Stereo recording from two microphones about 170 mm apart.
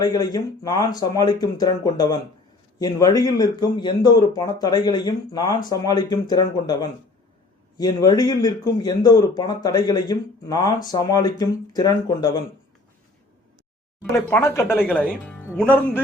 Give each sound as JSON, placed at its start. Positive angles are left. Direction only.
{"t": 0.0, "sound": "a man's voice", "side_deg": 25}
{"t": 14.3, "sound": "speech", "side_deg": 10}